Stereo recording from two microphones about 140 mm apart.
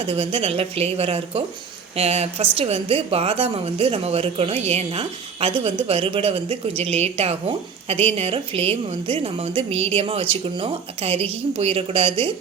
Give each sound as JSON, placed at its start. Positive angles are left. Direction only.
{"t": 0.0, "sound": "a woman's voice", "side_deg": -40}